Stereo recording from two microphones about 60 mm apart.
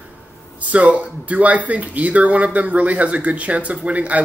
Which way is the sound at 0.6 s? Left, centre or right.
Right.